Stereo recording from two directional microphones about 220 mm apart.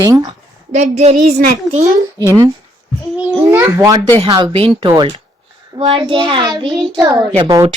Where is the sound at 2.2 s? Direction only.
15° right (ahead or behind).